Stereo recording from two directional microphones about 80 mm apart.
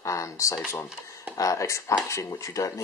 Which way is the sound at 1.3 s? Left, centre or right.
Left.